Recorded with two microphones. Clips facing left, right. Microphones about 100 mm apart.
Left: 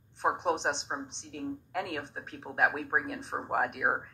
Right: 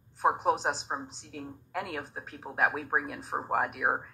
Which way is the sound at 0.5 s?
5° right (ahead or behind).